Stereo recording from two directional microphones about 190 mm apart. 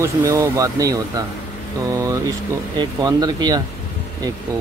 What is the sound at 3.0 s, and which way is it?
Speech, 20° right (ahead or behind).